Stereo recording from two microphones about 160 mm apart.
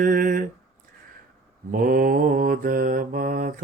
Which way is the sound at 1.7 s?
60° right (ahead or behind).